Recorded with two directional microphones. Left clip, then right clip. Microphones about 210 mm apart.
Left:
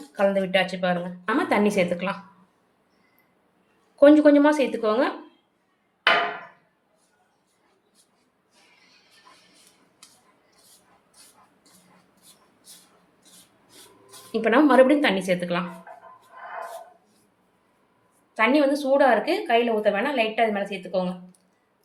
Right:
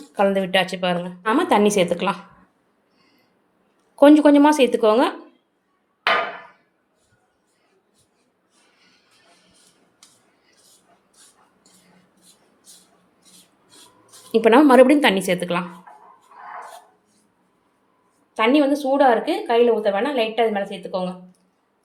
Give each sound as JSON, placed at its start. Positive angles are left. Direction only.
{"t": 0.1, "sound": "speech", "side_deg": -35}
{"t": 3.9, "sound": "speech", "side_deg": -35}
{"t": 14.3, "sound": "speech", "side_deg": -35}
{"t": 18.3, "sound": "a woman's voice", "side_deg": -20}